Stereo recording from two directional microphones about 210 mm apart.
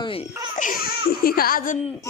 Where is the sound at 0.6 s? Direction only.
40° left (ahead or behind).